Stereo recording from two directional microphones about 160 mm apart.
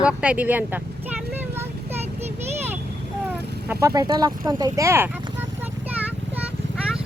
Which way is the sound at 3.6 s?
20° right (ahead or behind).